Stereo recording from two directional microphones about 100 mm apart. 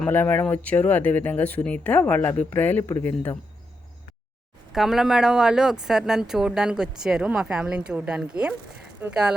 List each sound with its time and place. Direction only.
0.1 s speech: 20° left (ahead or behind)
4.7 s speech: 5° right (ahead or behind)